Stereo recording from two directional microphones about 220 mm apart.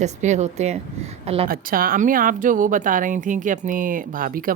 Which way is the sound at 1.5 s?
40° right (ahead or behind).